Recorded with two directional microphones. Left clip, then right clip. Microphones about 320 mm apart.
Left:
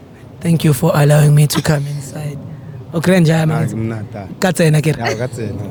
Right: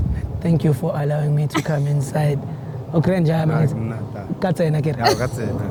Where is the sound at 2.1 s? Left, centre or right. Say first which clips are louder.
Right 9 dB; right.